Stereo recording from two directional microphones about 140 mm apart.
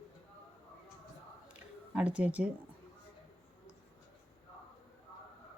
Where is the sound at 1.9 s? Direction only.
10° right (ahead or behind).